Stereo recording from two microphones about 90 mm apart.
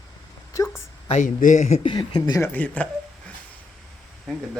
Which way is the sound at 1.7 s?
75° left (ahead or behind).